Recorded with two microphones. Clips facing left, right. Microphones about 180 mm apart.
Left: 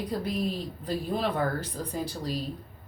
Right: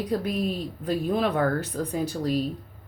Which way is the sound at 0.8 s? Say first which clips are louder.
Right 5 dB; 55° right (ahead or behind).